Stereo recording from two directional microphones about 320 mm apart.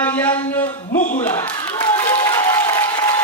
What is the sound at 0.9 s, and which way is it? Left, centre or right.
Speech, left.